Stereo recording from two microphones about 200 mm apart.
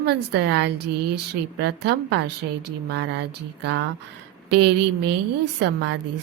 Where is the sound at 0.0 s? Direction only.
55° right (ahead or behind).